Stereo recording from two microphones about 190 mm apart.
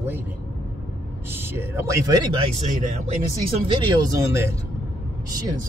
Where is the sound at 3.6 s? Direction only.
25° right (ahead or behind).